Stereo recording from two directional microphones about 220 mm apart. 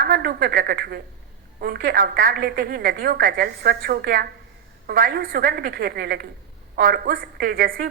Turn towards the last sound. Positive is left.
turn(degrees=-40)  # may be behind; listen again after turning